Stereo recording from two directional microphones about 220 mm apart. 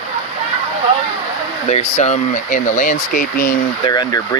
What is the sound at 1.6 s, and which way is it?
Speech, 30° left (ahead or behind).